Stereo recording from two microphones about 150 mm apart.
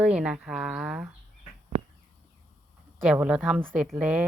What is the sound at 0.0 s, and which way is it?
A woman's voice, 5° right (ahead or behind).